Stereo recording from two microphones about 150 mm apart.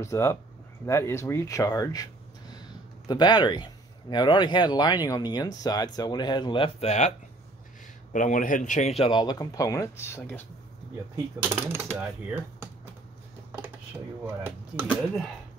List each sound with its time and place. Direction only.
0.0 s speech: 20° left (ahead or behind)
3.1 s speech: 30° left (ahead or behind); by 10.4 s 15° left (ahead or behind)
11.4 s speech: 15° right (ahead or behind)
14.2 s speech: 15° right (ahead or behind)